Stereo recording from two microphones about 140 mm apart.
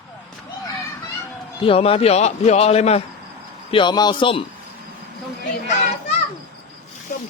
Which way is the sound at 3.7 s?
35° left (ahead or behind).